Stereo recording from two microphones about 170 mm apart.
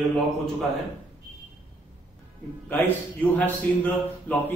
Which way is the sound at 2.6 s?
10° left (ahead or behind).